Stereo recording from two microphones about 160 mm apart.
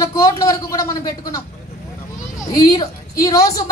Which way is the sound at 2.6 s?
20° left (ahead or behind).